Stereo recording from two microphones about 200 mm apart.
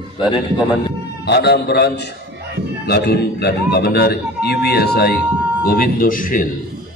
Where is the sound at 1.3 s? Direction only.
55° left (ahead or behind).